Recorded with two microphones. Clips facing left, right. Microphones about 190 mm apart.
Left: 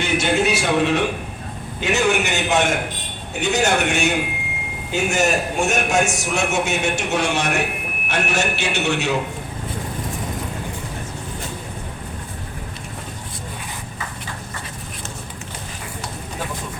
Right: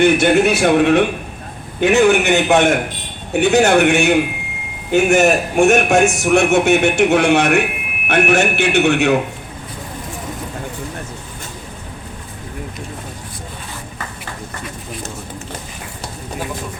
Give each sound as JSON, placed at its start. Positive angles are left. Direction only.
{"t": 0.0, "sound": "a man's voice", "side_deg": -55}